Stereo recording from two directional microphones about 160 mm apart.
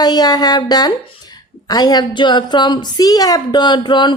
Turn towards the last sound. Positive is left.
turn(degrees=30)  # may be behind; listen again after turning